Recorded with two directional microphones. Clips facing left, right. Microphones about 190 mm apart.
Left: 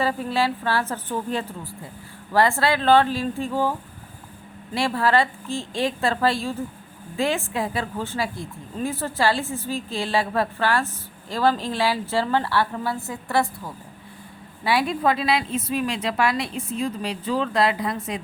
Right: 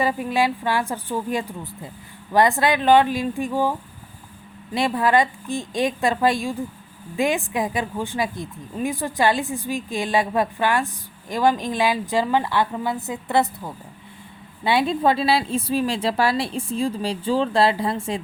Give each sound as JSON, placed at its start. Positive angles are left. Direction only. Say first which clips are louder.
{"t": 0.0, "sound": "a woman's voice", "louder": "right 2 dB", "side_deg": -15}